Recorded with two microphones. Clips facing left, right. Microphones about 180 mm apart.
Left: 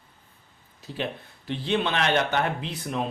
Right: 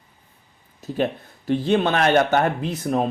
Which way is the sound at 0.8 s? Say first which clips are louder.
Right 8 dB; 45° right (ahead or behind).